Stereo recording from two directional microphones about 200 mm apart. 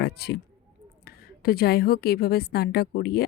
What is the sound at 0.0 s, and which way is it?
A woman's voice, 55° left (ahead or behind).